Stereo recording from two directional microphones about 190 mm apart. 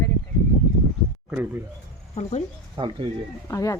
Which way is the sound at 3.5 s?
15° left (ahead or behind).